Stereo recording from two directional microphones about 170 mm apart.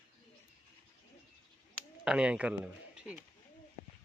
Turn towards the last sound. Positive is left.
turn(degrees=-5)  # may be behind; listen again after turning